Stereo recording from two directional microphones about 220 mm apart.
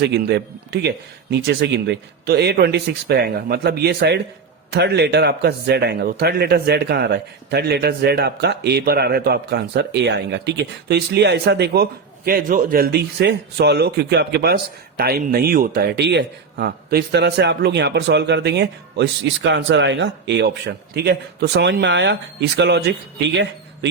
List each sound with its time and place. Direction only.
0.0 s a man's voice: 50° right (ahead or behind)